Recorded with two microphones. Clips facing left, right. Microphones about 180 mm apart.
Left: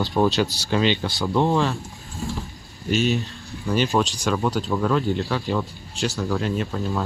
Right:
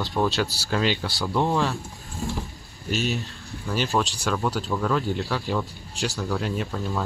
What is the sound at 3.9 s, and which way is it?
Speech, 10° left (ahead or behind).